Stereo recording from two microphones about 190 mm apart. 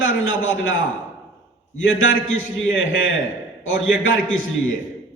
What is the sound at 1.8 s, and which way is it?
A man's voice, 90° left.